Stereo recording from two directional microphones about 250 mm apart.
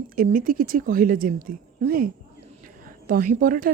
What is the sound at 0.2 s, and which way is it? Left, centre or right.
Speech, right.